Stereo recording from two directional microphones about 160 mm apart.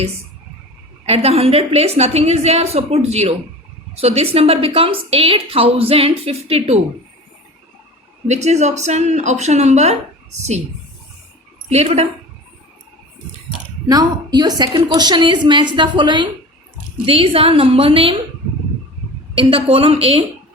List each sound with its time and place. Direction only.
1.0 s a woman's voice: 40° right (ahead or behind)
8.3 s speech: 45° right (ahead or behind)
11.7 s a woman's voice: 40° right (ahead or behind)
13.8 s a woman's voice: 25° right (ahead or behind)
19.3 s a woman's voice: 35° right (ahead or behind)